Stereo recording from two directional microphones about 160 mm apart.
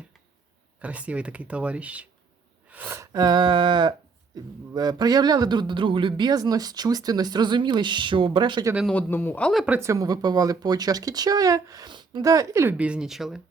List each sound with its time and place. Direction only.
0.8 s a man's voice: 10° right (ahead or behind); by 8.6 s 30° right (ahead or behind)
8.9 s speech: 10° left (ahead or behind)
9.5 s speech: centre (ahead or behind)
9.7 s a man's voice: 20° right (ahead or behind); by 13.4 s centre (ahead or behind)